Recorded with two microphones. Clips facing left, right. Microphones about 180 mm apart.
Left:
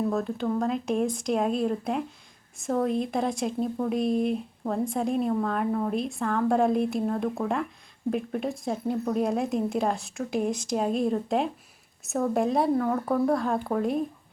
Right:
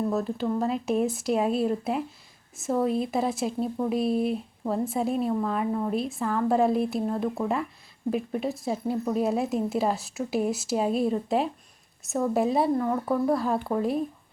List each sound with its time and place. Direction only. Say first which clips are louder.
0.0 s speech: even; 5° right (ahead or behind)